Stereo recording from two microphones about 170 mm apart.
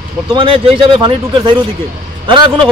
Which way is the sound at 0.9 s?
25° right (ahead or behind).